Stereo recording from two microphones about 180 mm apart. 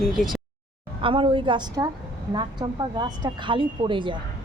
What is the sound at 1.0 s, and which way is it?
Speech, 30° right (ahead or behind).